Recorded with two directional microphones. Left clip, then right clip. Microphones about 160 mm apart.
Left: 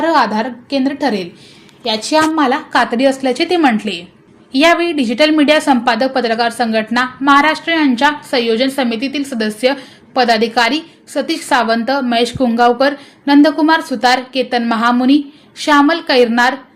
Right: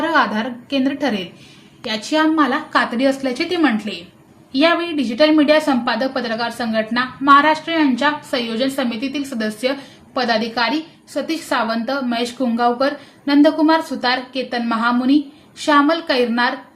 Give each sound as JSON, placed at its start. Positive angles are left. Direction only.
{"t": 0.0, "sound": "a woman's voice", "side_deg": 25}